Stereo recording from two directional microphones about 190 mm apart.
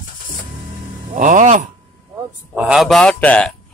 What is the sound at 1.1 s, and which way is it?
Speech, 40° right (ahead or behind).